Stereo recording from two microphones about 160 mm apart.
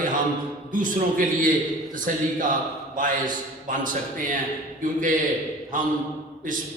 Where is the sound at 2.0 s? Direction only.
55° right (ahead or behind).